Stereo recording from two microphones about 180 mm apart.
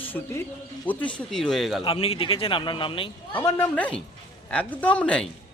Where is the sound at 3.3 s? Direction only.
10° left (ahead or behind).